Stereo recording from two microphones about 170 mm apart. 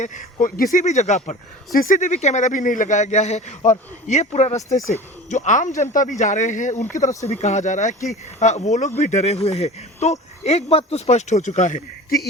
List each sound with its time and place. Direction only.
0.0 s speech: 45° left (ahead or behind)
1.7 s speech: 55° left (ahead or behind)